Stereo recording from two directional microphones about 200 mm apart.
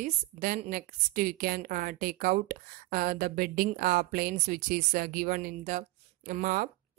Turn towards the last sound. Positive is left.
turn(degrees=-45)  # may be behind; listen again after turning